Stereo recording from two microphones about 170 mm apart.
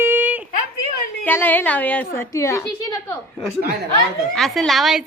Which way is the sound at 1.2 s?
10° left (ahead or behind).